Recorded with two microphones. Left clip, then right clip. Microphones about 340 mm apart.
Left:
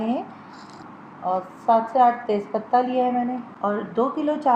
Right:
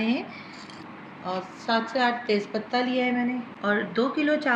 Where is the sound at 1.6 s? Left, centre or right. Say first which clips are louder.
Left 7 dB; left.